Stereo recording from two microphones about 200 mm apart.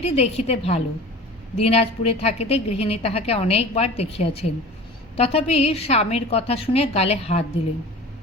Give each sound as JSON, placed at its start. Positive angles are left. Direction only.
{"t": 0.0, "sound": "a woman's voice", "side_deg": 30}